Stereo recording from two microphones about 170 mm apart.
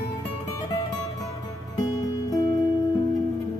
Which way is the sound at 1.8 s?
20° left (ahead or behind).